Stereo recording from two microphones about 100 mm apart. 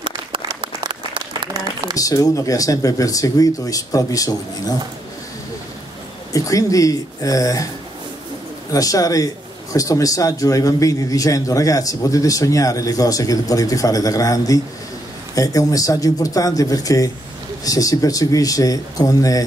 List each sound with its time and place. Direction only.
0.6 s applause: 55° right (ahead or behind)
1.5 s a sound: 45° right (ahead or behind)
2.0 s a man's voice: 35° left (ahead or behind)
6.3 s a man's voice: 35° left (ahead or behind)
8.7 s a man's voice: 35° left (ahead or behind)